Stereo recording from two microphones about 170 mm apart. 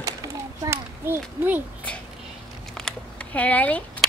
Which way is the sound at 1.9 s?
5° left (ahead or behind).